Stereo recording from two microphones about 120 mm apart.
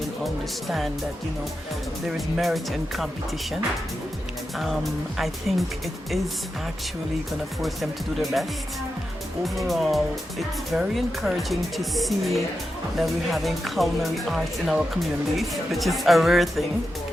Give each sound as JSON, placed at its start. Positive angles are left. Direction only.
{"t": 2.0, "sound": "speech", "side_deg": 0}
{"t": 4.5, "sound": "speech", "side_deg": 0}
{"t": 7.6, "sound": "speech", "side_deg": 0}